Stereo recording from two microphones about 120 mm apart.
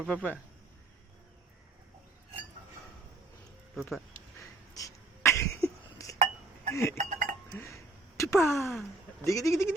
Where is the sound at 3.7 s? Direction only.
Centre (ahead or behind).